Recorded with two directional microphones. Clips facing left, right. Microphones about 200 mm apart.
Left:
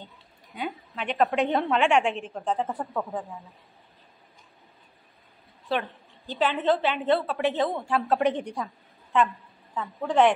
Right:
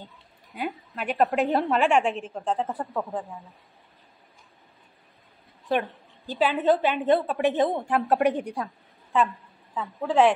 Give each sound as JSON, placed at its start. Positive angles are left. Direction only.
{"t": 0.0, "sound": "a woman's voice", "side_deg": 0}
{"t": 5.7, "sound": "a woman's voice", "side_deg": -15}
{"t": 9.8, "sound": "a woman's voice", "side_deg": 0}